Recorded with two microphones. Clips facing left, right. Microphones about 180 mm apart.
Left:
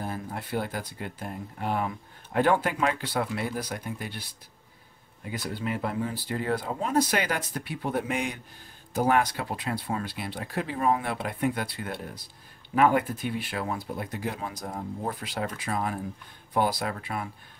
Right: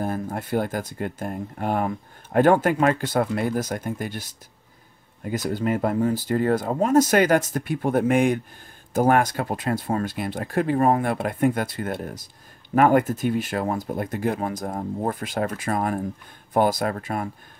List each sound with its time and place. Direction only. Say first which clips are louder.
0.0 s speech: right 7 dB; 45° right (ahead or behind)